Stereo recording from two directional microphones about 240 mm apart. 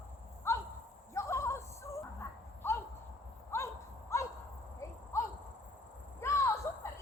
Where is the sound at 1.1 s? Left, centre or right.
Centre.